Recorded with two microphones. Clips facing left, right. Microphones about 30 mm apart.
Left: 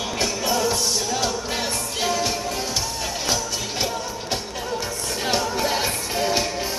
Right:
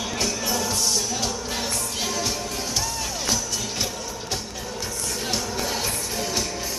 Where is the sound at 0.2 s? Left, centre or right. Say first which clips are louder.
Left 4 dB; centre.